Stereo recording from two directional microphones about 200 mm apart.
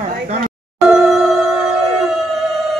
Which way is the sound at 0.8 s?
Centre (ahead or behind).